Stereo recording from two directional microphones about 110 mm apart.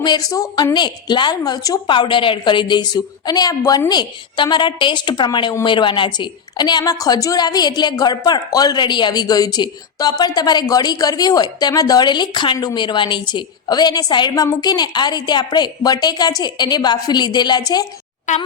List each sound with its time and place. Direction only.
0.0 s a woman's voice: 40° left (ahead or behind)
1.9 s a woman's voice: 45° left (ahead or behind)
18.3 s a child's voice: 90° left